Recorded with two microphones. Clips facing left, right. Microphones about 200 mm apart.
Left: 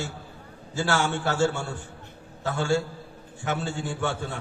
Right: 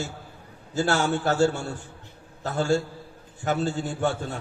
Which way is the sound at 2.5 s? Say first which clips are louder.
Right 2 dB; 40° right (ahead or behind).